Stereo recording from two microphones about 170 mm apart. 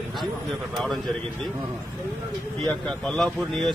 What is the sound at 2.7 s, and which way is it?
Speech, 5° left (ahead or behind).